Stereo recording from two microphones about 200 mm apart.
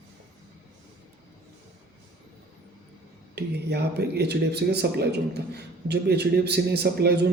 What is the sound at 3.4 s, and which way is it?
Speech, 55° right (ahead or behind).